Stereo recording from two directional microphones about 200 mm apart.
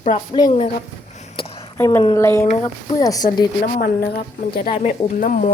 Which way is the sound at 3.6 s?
45° left (ahead or behind).